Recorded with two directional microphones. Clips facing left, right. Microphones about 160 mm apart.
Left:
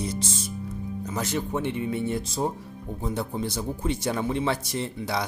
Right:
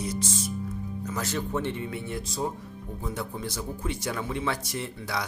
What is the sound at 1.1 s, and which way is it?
Speech, 20° left (ahead or behind).